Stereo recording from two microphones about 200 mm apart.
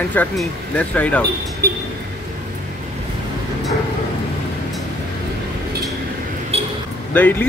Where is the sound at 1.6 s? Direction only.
50° right (ahead or behind).